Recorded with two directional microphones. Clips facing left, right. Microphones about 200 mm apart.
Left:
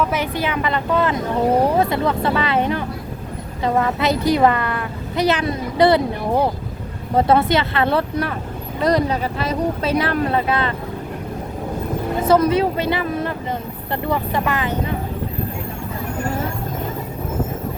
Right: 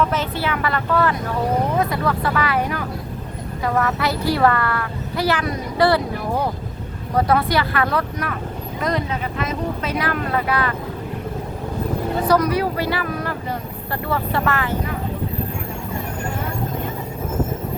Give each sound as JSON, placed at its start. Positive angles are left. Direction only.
{"t": 0.0, "sound": "a woman's voice", "side_deg": 10}
{"t": 12.3, "sound": "a woman's voice", "side_deg": 25}